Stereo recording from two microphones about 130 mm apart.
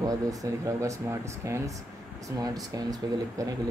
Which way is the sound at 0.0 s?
25° right (ahead or behind).